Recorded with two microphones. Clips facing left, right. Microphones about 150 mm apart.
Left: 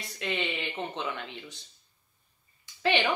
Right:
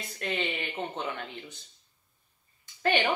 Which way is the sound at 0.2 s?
45° right (ahead or behind).